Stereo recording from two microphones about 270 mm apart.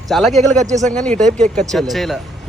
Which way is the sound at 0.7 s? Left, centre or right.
Right.